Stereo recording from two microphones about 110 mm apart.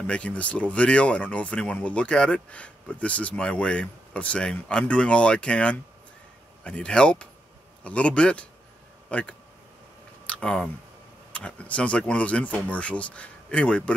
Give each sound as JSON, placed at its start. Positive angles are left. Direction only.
{"t": 0.0, "sound": "speech", "side_deg": 10}
{"t": 10.2, "sound": "a sound", "side_deg": 10}
{"t": 11.3, "sound": "speech", "side_deg": 10}